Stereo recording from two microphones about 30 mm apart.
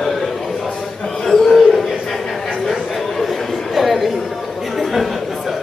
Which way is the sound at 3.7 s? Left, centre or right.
Centre.